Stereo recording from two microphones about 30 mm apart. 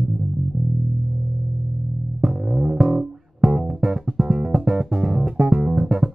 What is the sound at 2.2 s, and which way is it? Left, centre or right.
Music, right.